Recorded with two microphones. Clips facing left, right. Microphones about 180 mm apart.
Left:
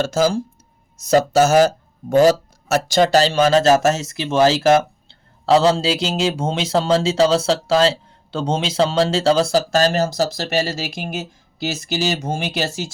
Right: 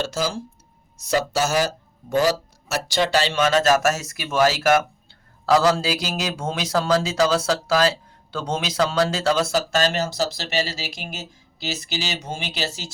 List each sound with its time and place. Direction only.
0.0 s speech: 45° left (ahead or behind)